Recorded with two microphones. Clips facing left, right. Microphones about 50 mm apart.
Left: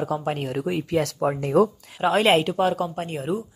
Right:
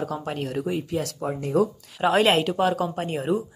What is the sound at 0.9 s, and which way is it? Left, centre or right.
Speech, left.